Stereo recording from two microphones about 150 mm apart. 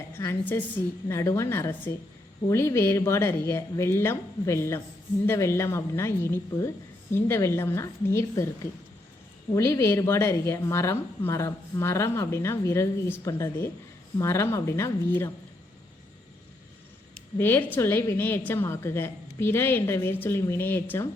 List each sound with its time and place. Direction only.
0.2 s a woman's voice: 15° left (ahead or behind)
9.6 s a woman's voice: 20° left (ahead or behind)
17.3 s a woman's voice: 15° left (ahead or behind)